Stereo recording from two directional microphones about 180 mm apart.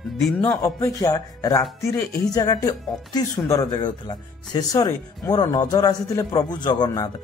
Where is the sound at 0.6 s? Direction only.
20° left (ahead or behind).